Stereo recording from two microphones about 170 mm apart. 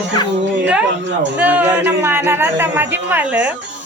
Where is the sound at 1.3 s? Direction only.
10° right (ahead or behind).